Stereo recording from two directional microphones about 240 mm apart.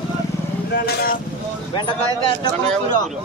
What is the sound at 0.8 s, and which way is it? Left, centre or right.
Vehicle, left.